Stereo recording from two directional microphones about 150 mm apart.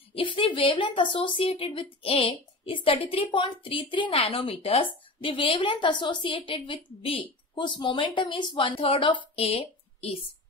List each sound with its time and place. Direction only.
0.1 s a woman's voice: 35° left (ahead or behind)